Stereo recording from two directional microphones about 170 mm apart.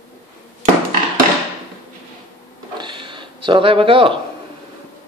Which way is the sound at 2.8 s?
30° right (ahead or behind).